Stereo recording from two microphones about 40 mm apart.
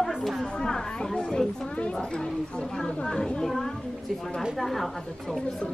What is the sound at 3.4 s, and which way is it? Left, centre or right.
Speech, centre.